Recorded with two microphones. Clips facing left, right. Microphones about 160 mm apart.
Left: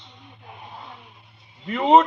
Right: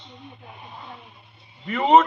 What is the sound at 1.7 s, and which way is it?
Speech, 10° left (ahead or behind).